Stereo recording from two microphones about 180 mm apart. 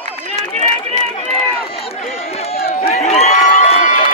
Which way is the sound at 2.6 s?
35° left (ahead or behind).